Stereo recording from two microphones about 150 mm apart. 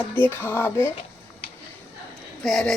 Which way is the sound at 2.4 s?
5° left (ahead or behind).